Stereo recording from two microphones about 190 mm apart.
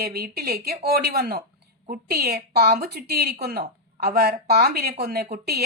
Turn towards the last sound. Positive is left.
turn(degrees=-55)  # may be behind; listen again after turning